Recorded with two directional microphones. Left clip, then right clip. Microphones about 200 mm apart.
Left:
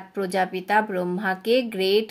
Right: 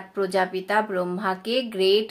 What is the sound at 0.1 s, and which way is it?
Speech, 45° left (ahead or behind).